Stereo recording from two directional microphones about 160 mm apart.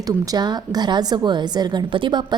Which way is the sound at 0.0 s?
25° right (ahead or behind).